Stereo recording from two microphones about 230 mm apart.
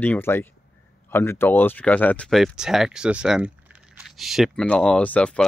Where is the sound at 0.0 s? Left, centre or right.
Centre.